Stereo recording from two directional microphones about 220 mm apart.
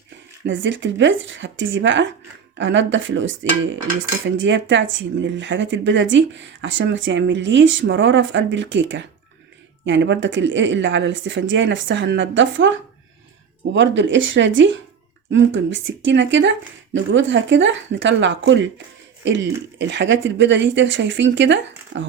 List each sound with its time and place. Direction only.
0.4 s speech: 60° right (ahead or behind)
13.7 s speech: 55° right (ahead or behind)